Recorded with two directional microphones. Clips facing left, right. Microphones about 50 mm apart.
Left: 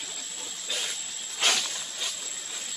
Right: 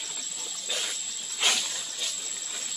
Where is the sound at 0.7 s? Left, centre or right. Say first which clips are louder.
Even; centre.